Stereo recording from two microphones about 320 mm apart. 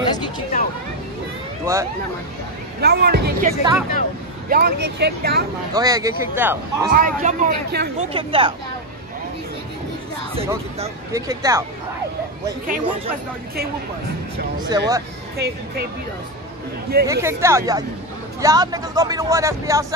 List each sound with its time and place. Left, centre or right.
0.0 s a sound: centre
1.7 s speech: centre
2.8 s speech: right
5.8 s speech: centre
6.9 s speech: right
8.1 s speech: centre
10.3 s speech: centre
14.6 s speech: centre
15.3 s speech: right
17.0 s speech: centre